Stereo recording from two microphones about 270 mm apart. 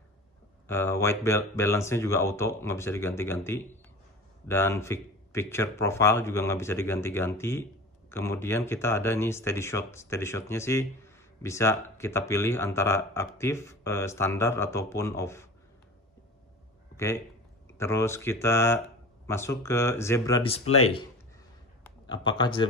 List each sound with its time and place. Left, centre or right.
0.7 s speech: centre
16.9 s speech: centre
20.6 s speech: left
22.0 s speech: centre